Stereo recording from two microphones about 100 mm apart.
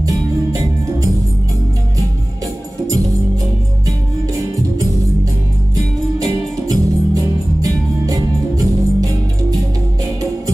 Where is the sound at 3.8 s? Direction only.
35° right (ahead or behind).